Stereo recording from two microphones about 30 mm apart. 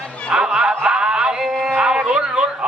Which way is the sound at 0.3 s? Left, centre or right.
Right.